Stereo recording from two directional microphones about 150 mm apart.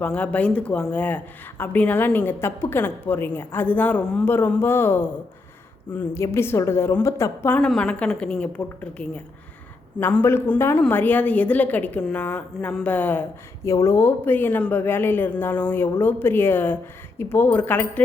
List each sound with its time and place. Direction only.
0.0 s speech: 10° left (ahead or behind)